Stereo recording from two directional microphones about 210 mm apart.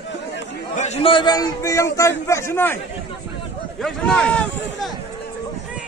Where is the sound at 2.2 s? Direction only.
15° left (ahead or behind).